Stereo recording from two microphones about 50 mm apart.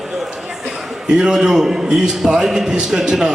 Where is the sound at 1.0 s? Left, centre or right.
Centre.